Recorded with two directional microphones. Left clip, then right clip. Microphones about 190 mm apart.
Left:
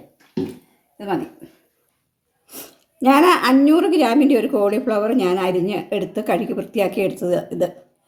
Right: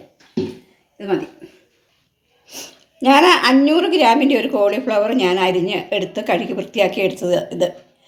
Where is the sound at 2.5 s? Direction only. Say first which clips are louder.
Right 1 dB; 50° left (ahead or behind).